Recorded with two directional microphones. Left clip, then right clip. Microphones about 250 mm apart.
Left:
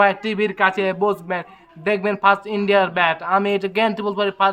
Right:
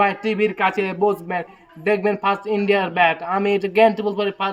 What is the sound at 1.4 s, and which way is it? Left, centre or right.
Speech, left.